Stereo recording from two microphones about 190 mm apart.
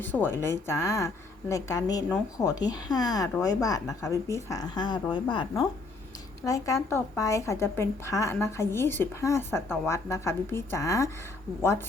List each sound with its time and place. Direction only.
0.0 s a woman's voice: 10° left (ahead or behind)